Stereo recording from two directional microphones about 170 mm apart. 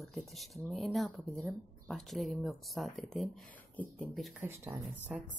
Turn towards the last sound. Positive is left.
turn(degrees=-10)  # may be behind; listen again after turning